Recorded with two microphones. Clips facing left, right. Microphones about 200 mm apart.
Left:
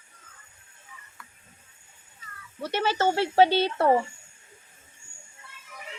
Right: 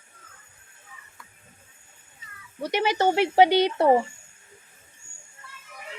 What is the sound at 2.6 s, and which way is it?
Speech, 15° right (ahead or behind).